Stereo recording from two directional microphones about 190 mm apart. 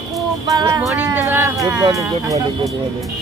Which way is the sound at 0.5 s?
20° right (ahead or behind).